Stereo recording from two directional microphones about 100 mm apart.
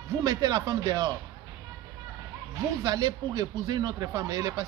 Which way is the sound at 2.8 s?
40° right (ahead or behind).